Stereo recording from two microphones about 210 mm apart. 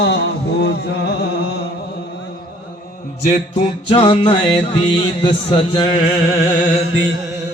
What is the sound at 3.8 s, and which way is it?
Music, 25° left (ahead or behind).